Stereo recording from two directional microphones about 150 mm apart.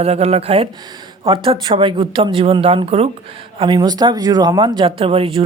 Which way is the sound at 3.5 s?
30° right (ahead or behind).